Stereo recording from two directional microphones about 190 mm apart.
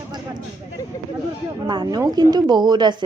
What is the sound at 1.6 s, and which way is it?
Speech, 25° right (ahead or behind).